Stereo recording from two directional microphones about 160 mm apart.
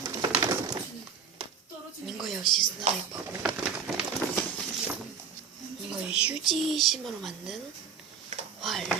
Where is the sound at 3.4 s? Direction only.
5° right (ahead or behind).